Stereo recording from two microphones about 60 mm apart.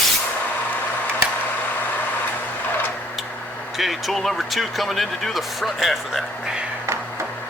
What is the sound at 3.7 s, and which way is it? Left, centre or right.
Speech, centre.